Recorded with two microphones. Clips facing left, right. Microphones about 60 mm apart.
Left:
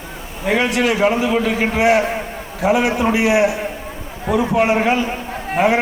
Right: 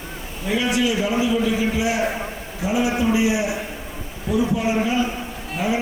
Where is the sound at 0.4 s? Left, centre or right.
Left.